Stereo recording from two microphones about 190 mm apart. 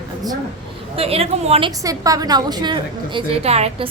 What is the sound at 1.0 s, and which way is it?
A woman's voice, 30° right (ahead or behind).